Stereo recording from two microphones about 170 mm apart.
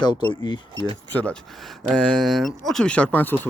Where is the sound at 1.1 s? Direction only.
5° left (ahead or behind).